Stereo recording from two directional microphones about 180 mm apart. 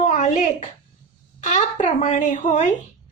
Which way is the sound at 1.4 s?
40° left (ahead or behind).